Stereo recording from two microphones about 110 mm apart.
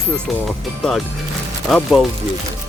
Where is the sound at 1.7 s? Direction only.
Centre (ahead or behind).